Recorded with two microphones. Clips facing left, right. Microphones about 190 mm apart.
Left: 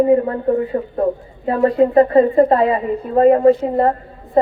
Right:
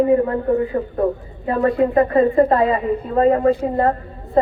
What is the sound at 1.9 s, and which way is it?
A woman's voice, 30° left (ahead or behind).